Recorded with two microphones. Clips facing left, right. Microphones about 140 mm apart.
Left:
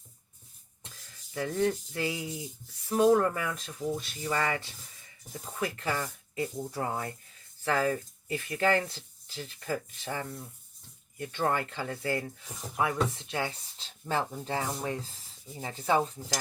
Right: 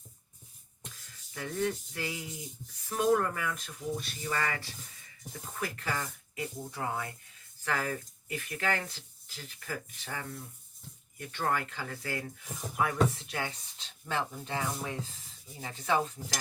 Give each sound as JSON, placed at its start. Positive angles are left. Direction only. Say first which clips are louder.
{"t": 1.3, "sound": "speech", "louder": "left 4 dB", "side_deg": 35}
{"t": 12.7, "sound": "speech", "louder": "even", "side_deg": 30}